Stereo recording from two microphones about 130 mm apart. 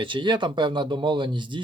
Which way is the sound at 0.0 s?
40° right (ahead or behind).